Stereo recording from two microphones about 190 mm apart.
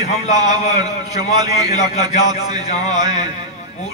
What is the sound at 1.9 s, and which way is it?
A man's voice, 35° left (ahead or behind).